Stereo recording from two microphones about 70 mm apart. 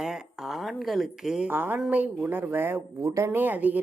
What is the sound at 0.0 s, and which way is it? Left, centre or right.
Speech, centre.